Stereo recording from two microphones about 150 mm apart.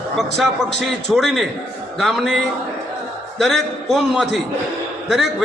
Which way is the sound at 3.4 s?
Centre (ahead or behind).